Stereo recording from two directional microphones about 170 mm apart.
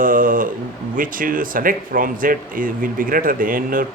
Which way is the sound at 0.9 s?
55° right (ahead or behind).